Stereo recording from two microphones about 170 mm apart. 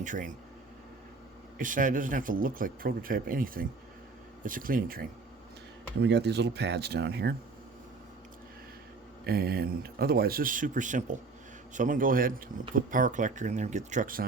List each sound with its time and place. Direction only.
0.0 s speech: 50° right (ahead or behind)
1.5 s speech: 50° right (ahead or behind)
6.0 s speech: 90° right; by 7.3 s 75° right (ahead or behind)
9.2 s speech: 65° right (ahead or behind)